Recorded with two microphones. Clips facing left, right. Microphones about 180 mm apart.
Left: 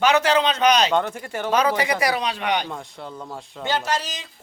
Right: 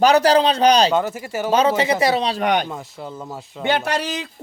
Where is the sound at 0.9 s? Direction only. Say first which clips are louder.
Right 2 dB; 5° right (ahead or behind).